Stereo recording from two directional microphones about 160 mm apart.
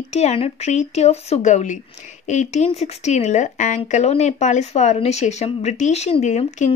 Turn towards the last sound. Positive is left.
turn(degrees=45)  # may be behind; listen again after turning